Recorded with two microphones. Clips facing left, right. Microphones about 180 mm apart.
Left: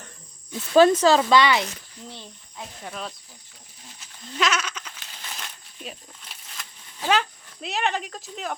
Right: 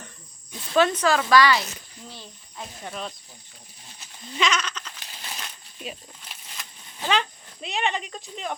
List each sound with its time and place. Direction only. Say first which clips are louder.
0.7 s speech: left 5 dB; 30° left (ahead or behind)
2.8 s speech: right 1 dB; centre (ahead or behind)
4.4 s sheep: even; 5° left (ahead or behind)
7.1 s speech: left 2 dB; 5° left (ahead or behind)